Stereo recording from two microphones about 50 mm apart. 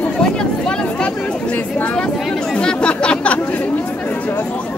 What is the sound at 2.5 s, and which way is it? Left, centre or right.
Chatter, centre.